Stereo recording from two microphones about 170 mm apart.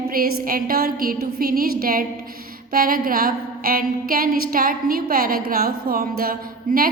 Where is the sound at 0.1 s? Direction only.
60° right (ahead or behind).